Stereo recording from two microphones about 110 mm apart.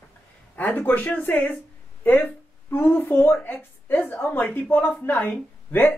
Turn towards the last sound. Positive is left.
turn(degrees=15)  # may be behind; listen again after turning